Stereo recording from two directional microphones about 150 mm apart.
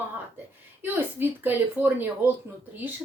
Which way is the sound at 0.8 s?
15° right (ahead or behind).